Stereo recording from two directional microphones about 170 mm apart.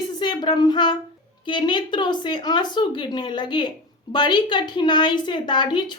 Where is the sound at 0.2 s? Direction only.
25° left (ahead or behind).